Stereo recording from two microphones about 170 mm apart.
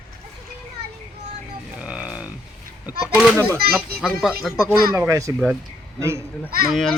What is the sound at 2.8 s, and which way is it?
Speech, 5° right (ahead or behind).